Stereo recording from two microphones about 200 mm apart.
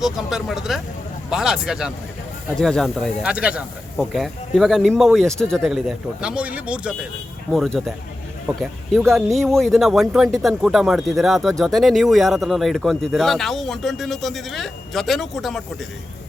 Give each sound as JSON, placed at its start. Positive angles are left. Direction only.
{"t": 0.0, "sound": "speech", "side_deg": 0}